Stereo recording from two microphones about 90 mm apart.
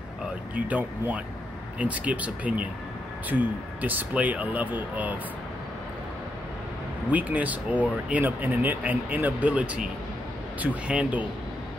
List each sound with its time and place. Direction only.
0.6 s speech: 15° right (ahead or behind)
7.1 s speech: 15° right (ahead or behind)